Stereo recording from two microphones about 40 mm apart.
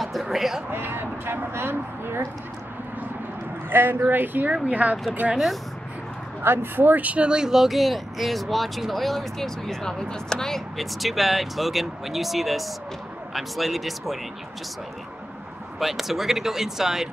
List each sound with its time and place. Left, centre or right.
0.0 s music: centre
0.7 s speech: right
3.7 s speech: right
4.6 s speech: right
5.2 s speech: centre
6.4 s speech: right
6.8 s speech: right
7.2 s speech: centre
7.5 s speech: centre
9.8 s speech: centre
10.8 s speech: centre
15.8 s speech: centre